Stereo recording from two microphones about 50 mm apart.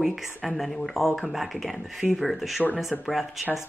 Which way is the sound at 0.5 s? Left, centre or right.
Centre.